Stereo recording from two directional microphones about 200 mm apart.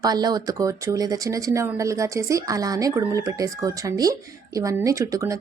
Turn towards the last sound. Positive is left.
turn(degrees=-15)  # may be behind; listen again after turning